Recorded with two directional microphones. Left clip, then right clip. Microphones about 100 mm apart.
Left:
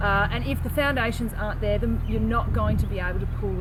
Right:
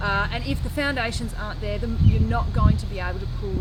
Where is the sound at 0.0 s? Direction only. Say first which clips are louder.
Left 1 dB; 25° right (ahead or behind).